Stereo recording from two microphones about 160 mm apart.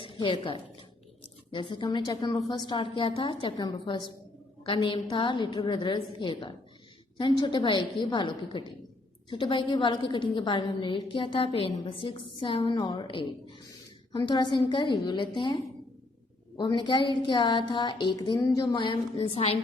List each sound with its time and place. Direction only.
0.0 s a woman's voice: 30° left (ahead or behind)
16.6 s a woman's voice: 30° left (ahead or behind)